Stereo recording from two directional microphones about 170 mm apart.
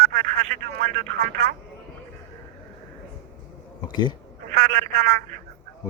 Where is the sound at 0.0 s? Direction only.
55° right (ahead or behind).